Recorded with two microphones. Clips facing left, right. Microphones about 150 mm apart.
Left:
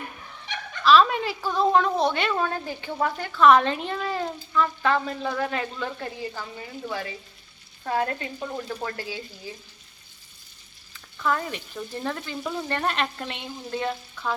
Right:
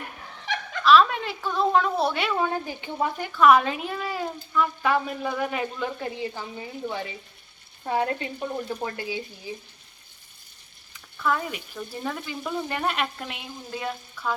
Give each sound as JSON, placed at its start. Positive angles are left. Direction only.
{"t": 0.5, "sound": "a sound", "side_deg": -90}
{"t": 0.9, "sound": "frying", "side_deg": 0}
{"t": 2.4, "sound": "speech", "side_deg": -15}
{"t": 10.9, "sound": "speech", "side_deg": -5}
{"t": 12.4, "sound": "frying", "side_deg": 5}
{"t": 12.6, "sound": "frying", "side_deg": -10}